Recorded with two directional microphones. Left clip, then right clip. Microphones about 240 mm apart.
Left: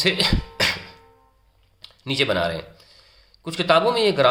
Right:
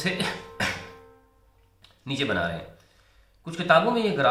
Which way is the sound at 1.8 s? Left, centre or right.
Left.